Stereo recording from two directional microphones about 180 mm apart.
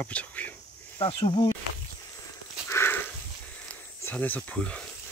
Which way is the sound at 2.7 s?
15° left (ahead or behind).